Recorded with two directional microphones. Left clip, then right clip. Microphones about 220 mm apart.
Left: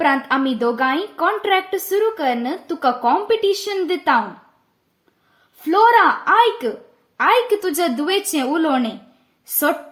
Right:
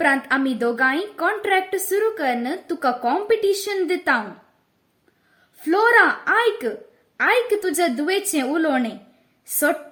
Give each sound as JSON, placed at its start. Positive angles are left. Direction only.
{"t": 0.0, "sound": "a woman's voice", "side_deg": 0}
{"t": 5.6, "sound": "a woman's voice", "side_deg": 0}